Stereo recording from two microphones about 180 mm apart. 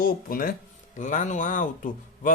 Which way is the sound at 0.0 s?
55° left (ahead or behind).